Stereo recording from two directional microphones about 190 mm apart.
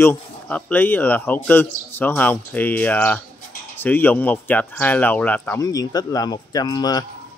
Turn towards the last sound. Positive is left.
turn(degrees=20)  # may be behind; listen again after turning